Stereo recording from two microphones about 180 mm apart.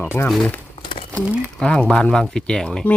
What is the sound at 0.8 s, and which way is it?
Crumpling, 30° left (ahead or behind).